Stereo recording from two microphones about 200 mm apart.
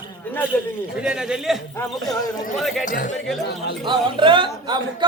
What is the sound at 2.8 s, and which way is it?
Speech, 40° left (ahead or behind).